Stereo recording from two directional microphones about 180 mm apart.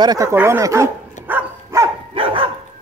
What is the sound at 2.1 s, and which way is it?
Dog, 30° right (ahead or behind).